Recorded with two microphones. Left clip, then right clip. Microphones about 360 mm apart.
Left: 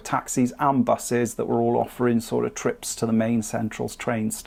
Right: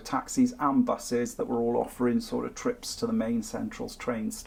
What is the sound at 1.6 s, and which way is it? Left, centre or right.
Speech, left.